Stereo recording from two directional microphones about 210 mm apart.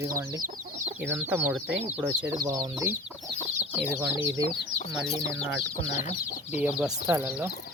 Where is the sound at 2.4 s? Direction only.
20° right (ahead or behind).